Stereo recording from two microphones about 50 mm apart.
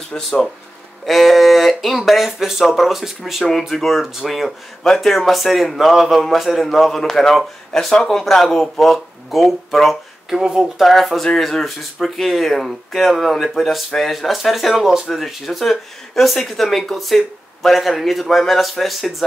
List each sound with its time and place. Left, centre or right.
0.1 s speech: centre
1.0 s speech: centre
4.8 s speech: centre
10.4 s speech: centre
10.8 s speech: centre